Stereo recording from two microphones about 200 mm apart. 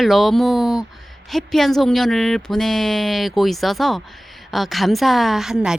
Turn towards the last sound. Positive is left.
turn(degrees=-5)  # may be behind; listen again after turning